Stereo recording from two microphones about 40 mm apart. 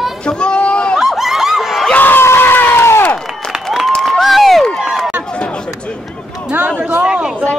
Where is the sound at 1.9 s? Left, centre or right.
Left.